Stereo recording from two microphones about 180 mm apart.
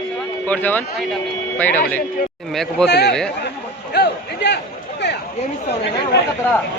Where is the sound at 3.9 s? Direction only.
70° left (ahead or behind).